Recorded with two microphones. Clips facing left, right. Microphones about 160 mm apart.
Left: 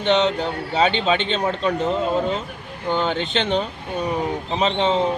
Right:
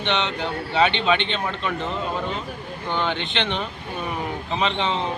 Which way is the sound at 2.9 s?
40° left (ahead or behind).